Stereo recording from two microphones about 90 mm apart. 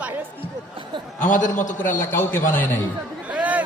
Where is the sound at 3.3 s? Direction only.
15° right (ahead or behind).